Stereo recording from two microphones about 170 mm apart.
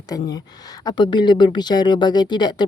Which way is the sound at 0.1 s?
20° left (ahead or behind).